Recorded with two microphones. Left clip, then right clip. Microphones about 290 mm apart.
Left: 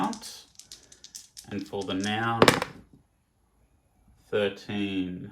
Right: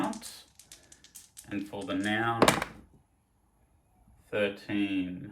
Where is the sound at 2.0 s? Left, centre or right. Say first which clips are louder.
Even; right.